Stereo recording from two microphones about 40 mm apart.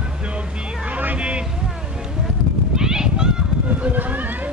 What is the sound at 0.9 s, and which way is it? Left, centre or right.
Music, right.